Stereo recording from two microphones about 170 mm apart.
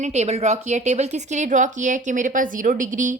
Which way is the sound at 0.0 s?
40° right (ahead or behind).